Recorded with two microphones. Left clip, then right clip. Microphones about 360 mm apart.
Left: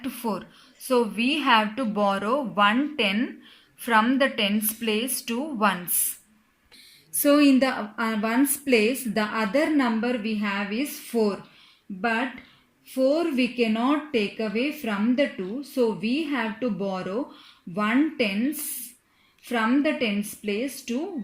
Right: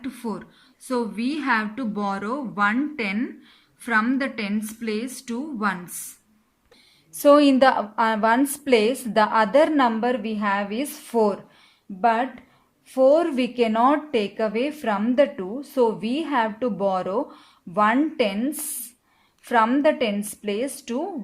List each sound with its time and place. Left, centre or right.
0.0 s a sound: centre
0.9 s a woman's voice: centre
7.1 s a woman's voice: right
12.9 s a woman's voice: right